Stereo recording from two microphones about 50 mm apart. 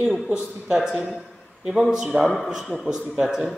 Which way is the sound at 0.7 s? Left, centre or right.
Centre.